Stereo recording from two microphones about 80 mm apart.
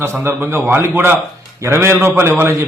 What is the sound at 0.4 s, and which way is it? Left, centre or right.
A man's voice, right.